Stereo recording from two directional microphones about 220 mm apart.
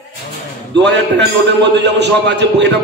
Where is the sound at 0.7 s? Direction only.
55° right (ahead or behind).